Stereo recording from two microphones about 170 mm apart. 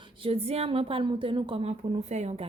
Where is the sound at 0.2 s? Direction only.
35° right (ahead or behind).